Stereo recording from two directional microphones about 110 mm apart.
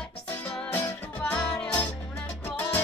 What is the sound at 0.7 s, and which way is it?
Music, 15° left (ahead or behind).